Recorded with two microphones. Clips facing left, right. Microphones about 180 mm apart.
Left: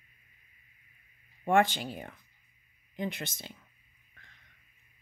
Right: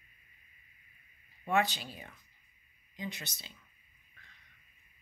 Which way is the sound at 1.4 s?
55° left (ahead or behind).